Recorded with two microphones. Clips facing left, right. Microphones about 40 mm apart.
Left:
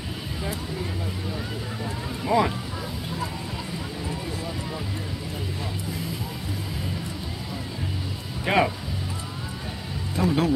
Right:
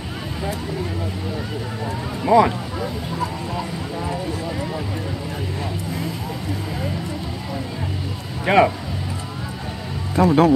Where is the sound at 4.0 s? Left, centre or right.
Right.